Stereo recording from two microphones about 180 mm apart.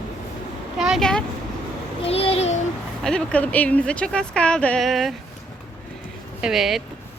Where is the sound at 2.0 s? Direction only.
30° left (ahead or behind).